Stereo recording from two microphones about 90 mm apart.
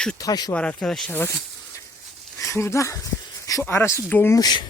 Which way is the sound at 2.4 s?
35° left (ahead or behind).